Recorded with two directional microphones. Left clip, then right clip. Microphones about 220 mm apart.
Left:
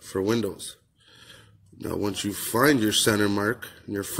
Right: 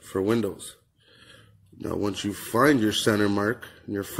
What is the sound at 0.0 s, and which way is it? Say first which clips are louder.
A man's voice: right 1 dB; centre (ahead or behind).